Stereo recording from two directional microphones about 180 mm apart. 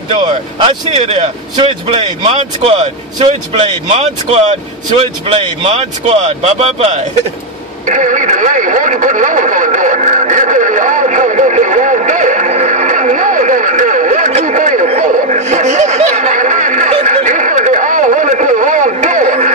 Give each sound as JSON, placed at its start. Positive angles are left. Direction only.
{"t": 0.9, "sound": "speech", "side_deg": -40}
{"t": 7.8, "sound": "radio", "side_deg": -45}